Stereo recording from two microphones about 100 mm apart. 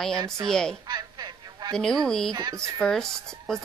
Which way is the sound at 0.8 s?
45° right (ahead or behind).